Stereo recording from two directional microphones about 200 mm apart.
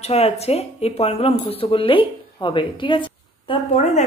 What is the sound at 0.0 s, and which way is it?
A woman's voice, 30° left (ahead or behind).